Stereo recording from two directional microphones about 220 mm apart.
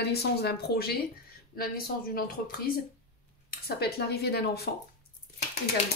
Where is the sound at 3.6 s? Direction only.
45° left (ahead or behind).